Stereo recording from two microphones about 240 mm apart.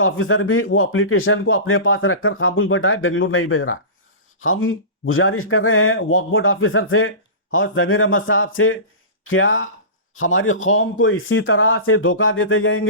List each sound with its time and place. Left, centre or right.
0.0 s speech: left